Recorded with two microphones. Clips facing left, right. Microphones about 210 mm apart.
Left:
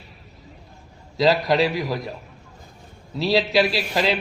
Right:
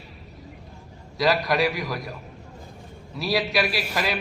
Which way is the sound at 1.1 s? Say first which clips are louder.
Left 4 dB; 25° left (ahead or behind).